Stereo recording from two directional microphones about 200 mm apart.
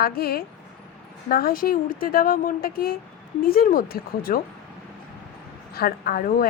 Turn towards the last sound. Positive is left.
turn(degrees=45)  # may be behind; listen again after turning